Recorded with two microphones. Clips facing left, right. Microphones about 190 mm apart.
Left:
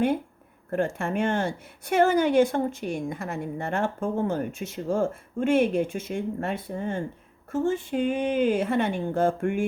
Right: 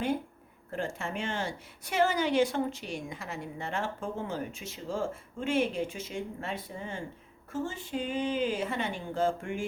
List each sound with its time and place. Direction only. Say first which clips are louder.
0.7 s a woman's voice: left 8 dB; 55° left (ahead or behind)